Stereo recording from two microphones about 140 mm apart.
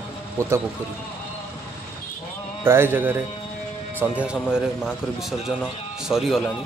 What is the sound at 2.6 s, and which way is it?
A man's voice, 15° right (ahead or behind).